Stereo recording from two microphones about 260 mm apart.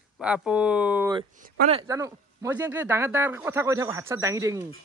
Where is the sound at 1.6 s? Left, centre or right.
Centre.